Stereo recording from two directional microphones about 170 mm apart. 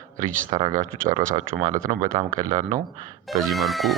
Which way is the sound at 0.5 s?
20° right (ahead or behind).